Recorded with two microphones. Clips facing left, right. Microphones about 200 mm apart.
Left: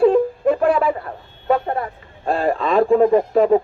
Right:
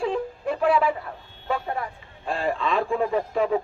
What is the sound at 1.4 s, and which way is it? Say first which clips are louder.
Vehicle: left 9 dB; 50° left (ahead or behind).